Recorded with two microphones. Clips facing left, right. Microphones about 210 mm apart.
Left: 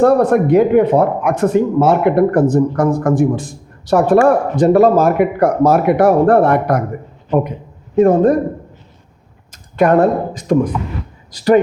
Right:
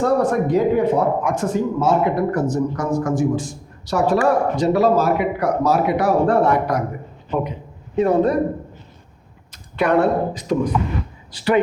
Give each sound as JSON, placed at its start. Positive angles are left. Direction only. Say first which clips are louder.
{"t": 0.0, "sound": "speech", "louder": "left 6 dB", "side_deg": 60}
{"t": 7.9, "sound": "speech", "louder": "left 6 dB", "side_deg": 45}
{"t": 9.5, "sound": "speech", "louder": "left 6 dB", "side_deg": 45}